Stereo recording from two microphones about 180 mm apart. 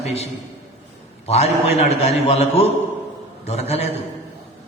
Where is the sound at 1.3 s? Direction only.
35° left (ahead or behind).